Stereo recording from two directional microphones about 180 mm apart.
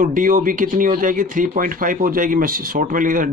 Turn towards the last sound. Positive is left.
turn(degrees=-50)  # may be behind; listen again after turning